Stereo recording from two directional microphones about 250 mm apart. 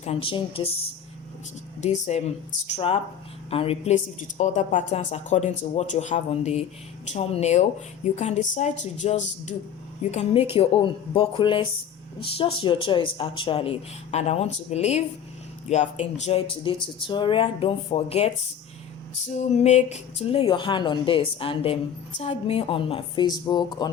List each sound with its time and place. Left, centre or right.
0.0 s a woman's voice: left
1.8 s a woman's voice: left
19.4 s a woman's voice: left